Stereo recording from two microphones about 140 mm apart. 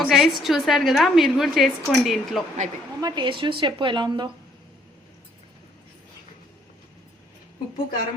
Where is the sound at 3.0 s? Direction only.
30° right (ahead or behind).